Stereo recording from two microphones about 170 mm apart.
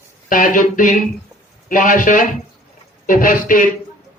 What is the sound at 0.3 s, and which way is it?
Speech, 50° left (ahead or behind).